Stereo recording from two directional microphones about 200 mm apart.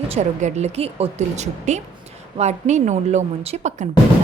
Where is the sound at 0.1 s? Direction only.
35° right (ahead or behind).